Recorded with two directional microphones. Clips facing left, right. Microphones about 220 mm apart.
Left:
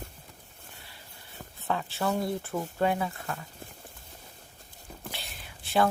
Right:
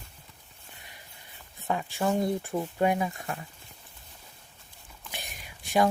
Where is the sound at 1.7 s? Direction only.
15° right (ahead or behind).